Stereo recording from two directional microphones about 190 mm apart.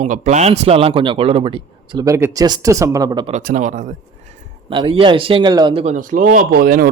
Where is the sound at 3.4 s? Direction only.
45° right (ahead or behind).